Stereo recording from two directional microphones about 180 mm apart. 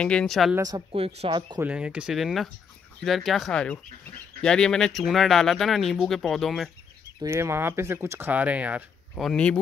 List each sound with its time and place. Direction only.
0.0 s speech: 5° left (ahead or behind)
0.6 s speech: 20° right (ahead or behind)
0.9 s speech: 35° right (ahead or behind)
1.6 s speech: 5° right (ahead or behind)
7.2 s speech: 15° right (ahead or behind); by 9.6 s 5° left (ahead or behind)